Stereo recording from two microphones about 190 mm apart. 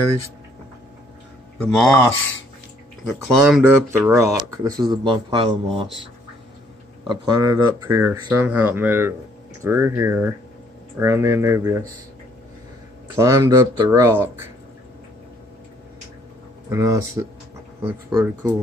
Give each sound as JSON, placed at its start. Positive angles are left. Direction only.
{"t": 1.6, "sound": "speech", "side_deg": 5}
{"t": 3.3, "sound": "speech", "side_deg": 0}
{"t": 3.6, "sound": "speech", "side_deg": -10}
{"t": 7.1, "sound": "speech", "side_deg": -20}
{"t": 13.1, "sound": "speech", "side_deg": -15}
{"t": 16.6, "sound": "speech", "side_deg": -15}